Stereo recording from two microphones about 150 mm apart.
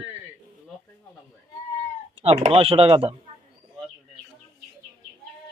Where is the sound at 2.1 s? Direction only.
40° right (ahead or behind).